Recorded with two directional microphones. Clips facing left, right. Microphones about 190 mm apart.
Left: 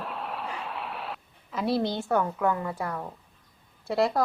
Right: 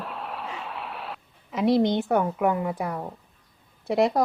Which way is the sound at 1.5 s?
20° right (ahead or behind).